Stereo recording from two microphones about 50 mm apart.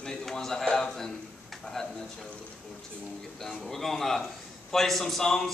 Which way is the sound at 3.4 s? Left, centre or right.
Centre.